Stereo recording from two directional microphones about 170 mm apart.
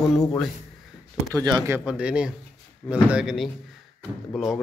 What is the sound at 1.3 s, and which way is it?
Speech, 25° right (ahead or behind).